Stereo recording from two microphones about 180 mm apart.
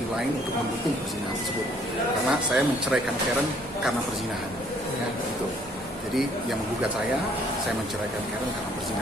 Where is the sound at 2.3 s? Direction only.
5° right (ahead or behind).